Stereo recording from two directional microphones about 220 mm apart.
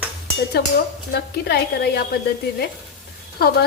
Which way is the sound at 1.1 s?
45° left (ahead or behind).